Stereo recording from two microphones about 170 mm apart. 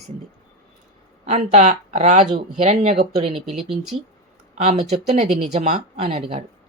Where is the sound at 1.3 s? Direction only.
45° right (ahead or behind).